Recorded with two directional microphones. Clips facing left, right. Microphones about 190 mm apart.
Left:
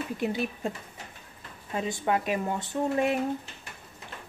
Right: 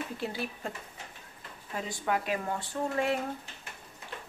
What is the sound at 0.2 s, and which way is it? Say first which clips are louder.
Speech: left 7 dB; 20° left (ahead or behind).